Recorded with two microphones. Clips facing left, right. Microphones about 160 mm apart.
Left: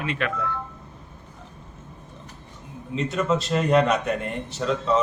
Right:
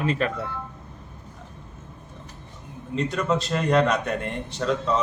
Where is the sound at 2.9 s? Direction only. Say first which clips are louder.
Left 1 dB; centre (ahead or behind).